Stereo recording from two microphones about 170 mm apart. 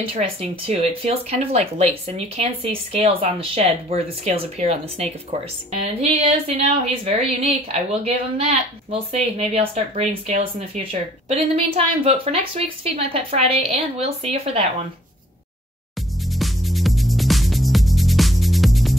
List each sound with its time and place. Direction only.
0.1 s speech: 35° right (ahead or behind)
16.3 s music: centre (ahead or behind)